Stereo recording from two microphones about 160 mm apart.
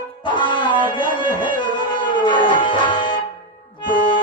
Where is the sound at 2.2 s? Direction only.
30° left (ahead or behind).